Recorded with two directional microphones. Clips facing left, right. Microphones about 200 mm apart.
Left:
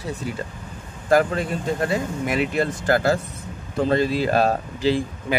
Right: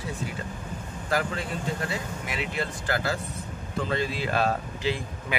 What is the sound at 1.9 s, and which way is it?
Speech, 50° left (ahead or behind).